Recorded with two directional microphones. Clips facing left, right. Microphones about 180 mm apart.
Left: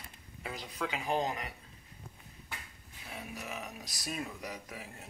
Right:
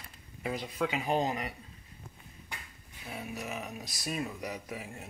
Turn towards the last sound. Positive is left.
turn(degrees=-10)  # may be behind; listen again after turning